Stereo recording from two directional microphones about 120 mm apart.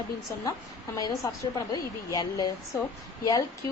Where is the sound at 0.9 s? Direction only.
30° left (ahead or behind).